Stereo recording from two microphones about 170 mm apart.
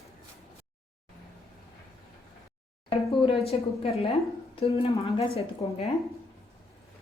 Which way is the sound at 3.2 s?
35° left (ahead or behind).